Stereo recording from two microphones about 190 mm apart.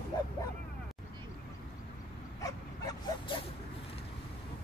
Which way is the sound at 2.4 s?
20° left (ahead or behind).